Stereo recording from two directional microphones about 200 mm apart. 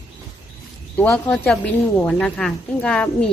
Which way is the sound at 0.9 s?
5° left (ahead or behind).